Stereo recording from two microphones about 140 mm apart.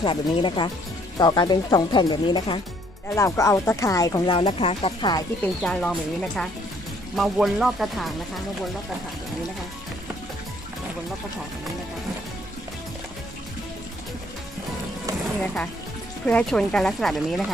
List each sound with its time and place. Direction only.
0.0 s speech: 35° left (ahead or behind)
3.2 s speech: 20° left (ahead or behind)
4.3 s speech: 35° left (ahead or behind)
5.4 s speech: 5° left (ahead or behind)
16.2 s speech: 10° left (ahead or behind)